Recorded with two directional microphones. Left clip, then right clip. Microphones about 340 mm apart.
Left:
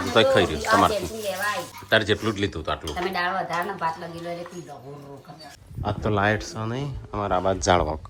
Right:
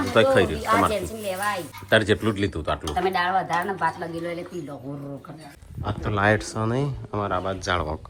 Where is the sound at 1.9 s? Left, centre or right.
Centre.